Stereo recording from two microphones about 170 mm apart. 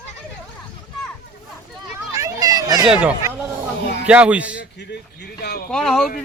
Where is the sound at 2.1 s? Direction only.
20° right (ahead or behind).